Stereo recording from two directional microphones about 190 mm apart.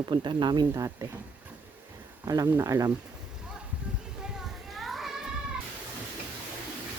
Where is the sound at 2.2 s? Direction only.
15° right (ahead or behind).